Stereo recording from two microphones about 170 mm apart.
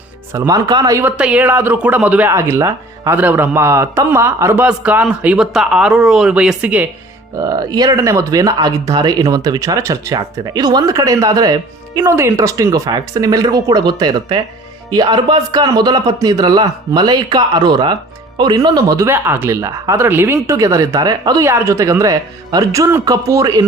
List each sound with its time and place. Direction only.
0.3 s speech: 20° right (ahead or behind)
1.1 s speech: 5° right (ahead or behind)
7.3 s speech: 20° right (ahead or behind)